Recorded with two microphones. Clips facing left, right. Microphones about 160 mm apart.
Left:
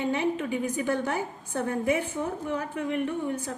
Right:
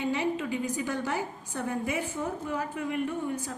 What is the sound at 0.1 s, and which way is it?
A woman's voice, 55° left (ahead or behind).